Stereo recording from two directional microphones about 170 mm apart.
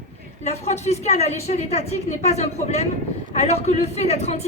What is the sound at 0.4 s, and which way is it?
A woman's voice, 40° left (ahead or behind).